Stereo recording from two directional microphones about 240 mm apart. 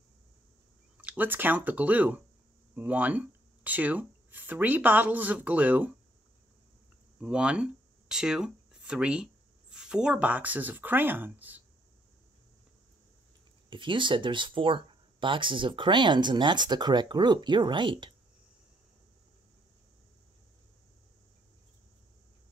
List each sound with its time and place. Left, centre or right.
0.9 s speech: centre
7.2 s speech: centre
13.7 s speech: right